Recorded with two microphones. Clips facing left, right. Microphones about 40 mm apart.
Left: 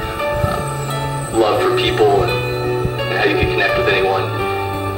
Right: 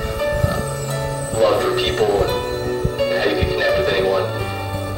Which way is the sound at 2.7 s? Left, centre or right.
Left.